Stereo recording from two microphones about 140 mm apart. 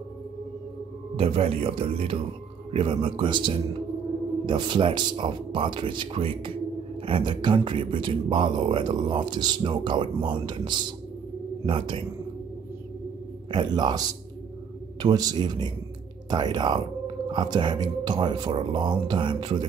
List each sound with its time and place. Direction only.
1.1 s speech: 45° right (ahead or behind)
13.5 s a man's voice: 30° right (ahead or behind)